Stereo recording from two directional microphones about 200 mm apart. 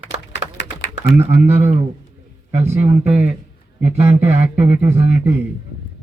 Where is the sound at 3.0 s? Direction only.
30° right (ahead or behind).